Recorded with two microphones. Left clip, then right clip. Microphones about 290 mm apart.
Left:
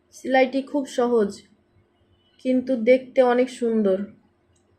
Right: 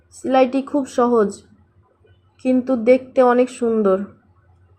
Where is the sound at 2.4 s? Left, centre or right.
Centre.